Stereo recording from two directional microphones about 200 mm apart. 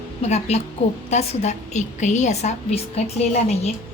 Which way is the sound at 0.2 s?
35° left (ahead or behind).